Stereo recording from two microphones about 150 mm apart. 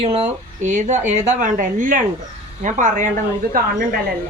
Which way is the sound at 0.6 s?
55° right (ahead or behind).